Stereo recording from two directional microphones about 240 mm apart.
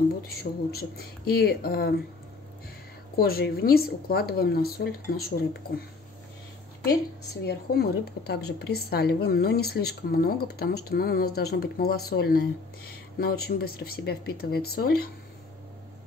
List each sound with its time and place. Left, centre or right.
0.3 s a woman's voice: left
3.2 s a woman's voice: left
7.4 s a woman's voice: left